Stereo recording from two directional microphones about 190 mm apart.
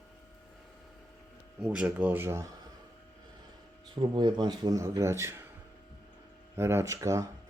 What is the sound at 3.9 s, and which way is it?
Speech, 25° right (ahead or behind).